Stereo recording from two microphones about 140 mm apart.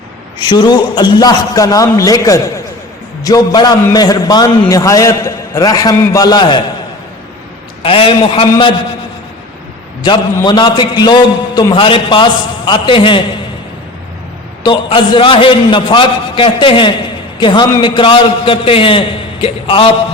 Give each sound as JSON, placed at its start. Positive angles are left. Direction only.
{"t": 0.3, "sound": "a man's voice", "side_deg": 30}
{"t": 7.8, "sound": "a man's voice", "side_deg": 40}
{"t": 10.0, "sound": "a man's voice", "side_deg": 30}
{"t": 14.6, "sound": "a man's voice", "side_deg": 35}